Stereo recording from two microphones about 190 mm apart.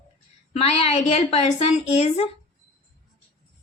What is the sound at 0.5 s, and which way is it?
A woman's voice, 30° left (ahead or behind).